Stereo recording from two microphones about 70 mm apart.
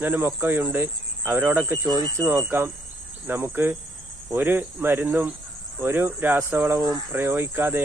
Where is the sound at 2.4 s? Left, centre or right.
Right.